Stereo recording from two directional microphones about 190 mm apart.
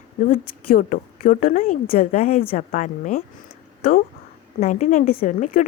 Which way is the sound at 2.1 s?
35° left (ahead or behind).